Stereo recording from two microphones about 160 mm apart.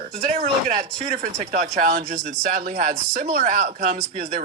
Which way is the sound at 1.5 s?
60° right (ahead or behind).